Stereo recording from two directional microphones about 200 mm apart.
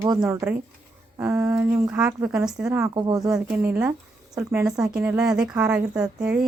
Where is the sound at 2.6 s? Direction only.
15° right (ahead or behind).